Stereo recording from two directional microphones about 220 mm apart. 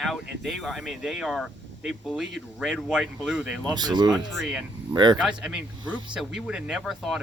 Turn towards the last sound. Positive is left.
turn(degrees=0)  # may be behind; listen again after turning